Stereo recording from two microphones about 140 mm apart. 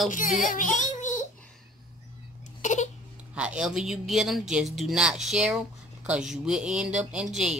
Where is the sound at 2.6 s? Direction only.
55° left (ahead or behind).